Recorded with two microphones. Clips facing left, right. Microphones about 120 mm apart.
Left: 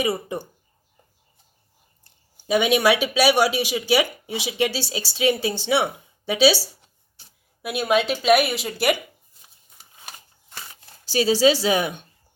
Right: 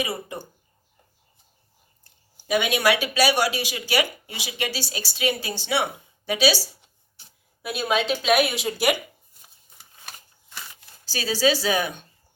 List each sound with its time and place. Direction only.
0.0 s speech: 25° left (ahead or behind)
2.5 s speech: 25° left (ahead or behind)
7.6 s a woman's voice: 10° left (ahead or behind)
11.1 s speech: 25° left (ahead or behind)